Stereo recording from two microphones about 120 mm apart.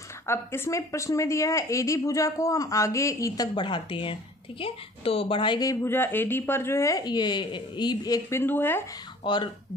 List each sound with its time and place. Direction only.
0.3 s speech: 20° left (ahead or behind)
3.5 s speech: 45° left (ahead or behind)
5.7 s speech: 20° left (ahead or behind)
8.4 s speech: 20° left (ahead or behind)
9.2 s speech: 40° left (ahead or behind)